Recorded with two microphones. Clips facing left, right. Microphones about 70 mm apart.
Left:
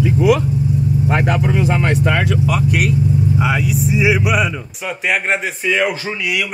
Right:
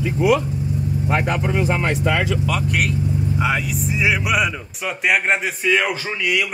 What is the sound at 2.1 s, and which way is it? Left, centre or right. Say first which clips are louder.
Speech: left 3 dB; left.